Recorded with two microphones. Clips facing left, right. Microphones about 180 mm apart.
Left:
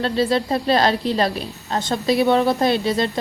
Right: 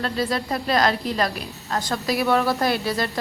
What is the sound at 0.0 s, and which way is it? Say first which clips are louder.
A woman's voice: left 5 dB; 30° left (ahead or behind).